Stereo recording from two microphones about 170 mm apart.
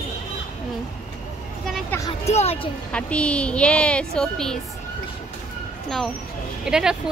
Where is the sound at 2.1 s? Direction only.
35° left (ahead or behind).